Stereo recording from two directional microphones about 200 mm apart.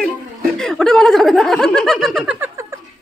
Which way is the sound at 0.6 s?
Centre (ahead or behind).